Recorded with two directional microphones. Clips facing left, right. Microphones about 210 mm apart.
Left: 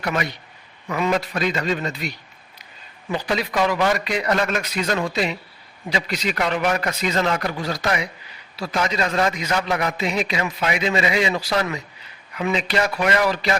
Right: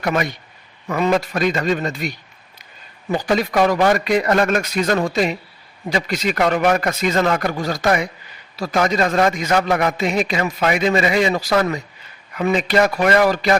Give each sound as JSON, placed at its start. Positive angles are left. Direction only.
{"t": 0.0, "sound": "a man's voice", "side_deg": -45}